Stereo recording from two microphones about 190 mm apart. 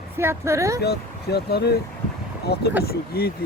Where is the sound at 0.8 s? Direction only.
60° left (ahead or behind).